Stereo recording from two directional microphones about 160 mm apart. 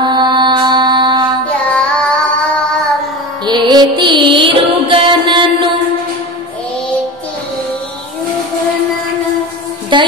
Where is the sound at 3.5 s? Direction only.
25° right (ahead or behind).